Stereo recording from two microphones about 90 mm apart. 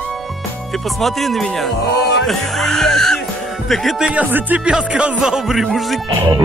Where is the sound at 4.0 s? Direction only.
15° right (ahead or behind).